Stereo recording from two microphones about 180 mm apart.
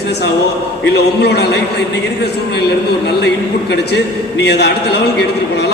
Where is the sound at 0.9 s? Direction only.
65° left (ahead or behind).